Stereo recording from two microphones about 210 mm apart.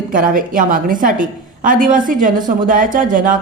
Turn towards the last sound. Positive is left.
turn(degrees=-40)  # may be behind; listen again after turning